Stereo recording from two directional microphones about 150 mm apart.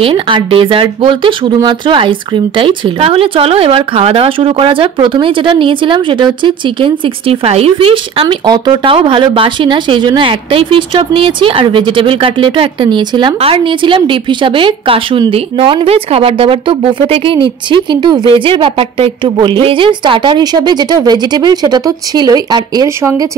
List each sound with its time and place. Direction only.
0.0 s a woman's voice: 35° right (ahead or behind)